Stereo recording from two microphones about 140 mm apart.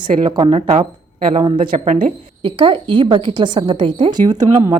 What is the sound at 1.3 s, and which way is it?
A woman's voice, 35° right (ahead or behind).